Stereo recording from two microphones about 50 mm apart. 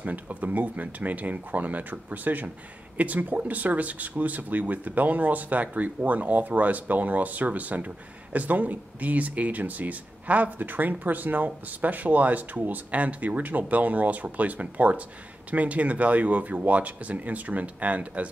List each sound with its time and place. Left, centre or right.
0.0 s speech: right